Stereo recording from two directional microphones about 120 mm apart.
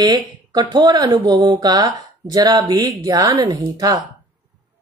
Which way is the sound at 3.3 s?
40° right (ahead or behind).